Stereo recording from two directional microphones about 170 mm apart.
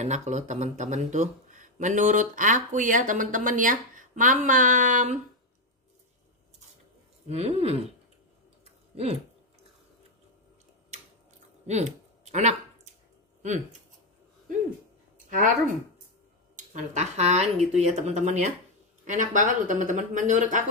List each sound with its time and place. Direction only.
0.0 s speech: 45° right (ahead or behind)
7.2 s speech: 40° right (ahead or behind)
8.9 s speech: 35° right (ahead or behind)
11.6 s a sound: 40° right (ahead or behind)
15.2 s speech: 50° right (ahead or behind)
16.5 s speech: 45° right (ahead or behind)